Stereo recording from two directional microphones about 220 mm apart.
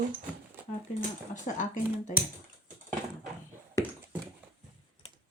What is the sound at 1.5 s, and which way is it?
Speech, 35° left (ahead or behind).